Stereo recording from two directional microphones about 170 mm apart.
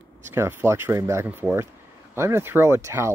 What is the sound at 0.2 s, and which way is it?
Speech, 15° right (ahead or behind).